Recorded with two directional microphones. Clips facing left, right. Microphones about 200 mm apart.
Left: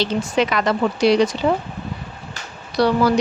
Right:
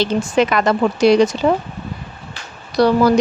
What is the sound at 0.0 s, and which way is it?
A woman's voice, 50° right (ahead or behind).